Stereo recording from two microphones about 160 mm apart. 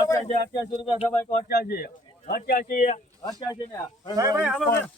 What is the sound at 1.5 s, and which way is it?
Speech, 70° left (ahead or behind).